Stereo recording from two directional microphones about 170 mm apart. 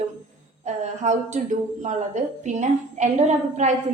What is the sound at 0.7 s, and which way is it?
Speech, 45° right (ahead or behind).